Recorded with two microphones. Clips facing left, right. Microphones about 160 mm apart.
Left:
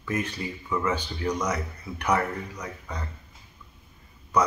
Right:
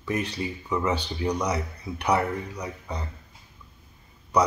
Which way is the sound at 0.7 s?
20° right (ahead or behind).